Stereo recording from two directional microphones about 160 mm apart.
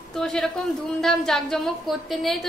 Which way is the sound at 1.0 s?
Centre (ahead or behind).